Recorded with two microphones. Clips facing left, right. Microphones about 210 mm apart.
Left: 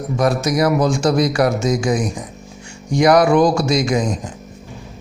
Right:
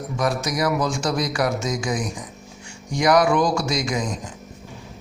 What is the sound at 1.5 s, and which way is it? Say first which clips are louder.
Speech: left 7 dB; 25° left (ahead or behind).